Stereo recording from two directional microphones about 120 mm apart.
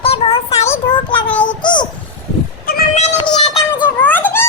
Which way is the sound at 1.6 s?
40° left (ahead or behind).